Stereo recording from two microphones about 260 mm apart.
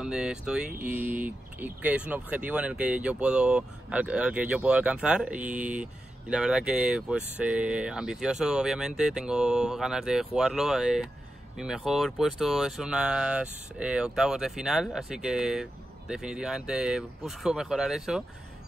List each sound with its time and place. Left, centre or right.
0.0 s speech: centre